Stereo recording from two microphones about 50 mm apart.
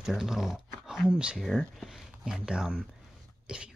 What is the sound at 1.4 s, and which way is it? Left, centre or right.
Speech, centre.